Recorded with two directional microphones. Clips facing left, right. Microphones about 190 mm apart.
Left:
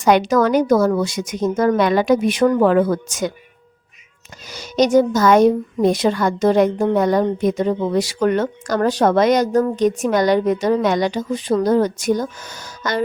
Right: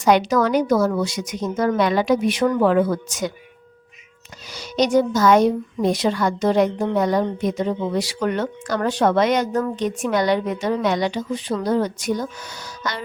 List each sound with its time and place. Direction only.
0.0 s a woman's voice: 50° left (ahead or behind)
4.4 s a woman's voice: 45° left (ahead or behind)